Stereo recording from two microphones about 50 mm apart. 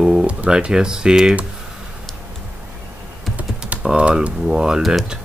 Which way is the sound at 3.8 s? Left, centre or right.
Centre.